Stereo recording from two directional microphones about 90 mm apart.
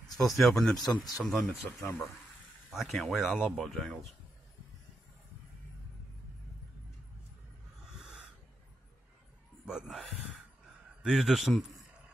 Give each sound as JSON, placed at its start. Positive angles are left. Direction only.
{"t": 0.4, "sound": "speech", "side_deg": 0}
{"t": 0.7, "sound": "speech", "side_deg": 45}
{"t": 1.2, "sound": "speech", "side_deg": 0}
{"t": 7.9, "sound": "snort", "side_deg": -10}
{"t": 9.7, "sound": "a man's voice", "side_deg": -5}